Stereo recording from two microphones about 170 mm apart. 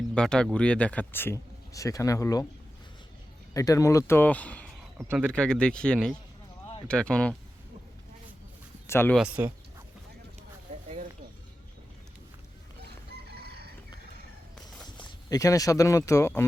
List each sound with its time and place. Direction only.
0.1 s speech: 5° left (ahead or behind)
3.5 s speech: 20° left (ahead or behind)
8.9 s speech: 15° left (ahead or behind)
9.1 s speech: 10° right (ahead or behind)
12.8 s chicken: 70° right (ahead or behind)
15.3 s speech: 20° left (ahead or behind)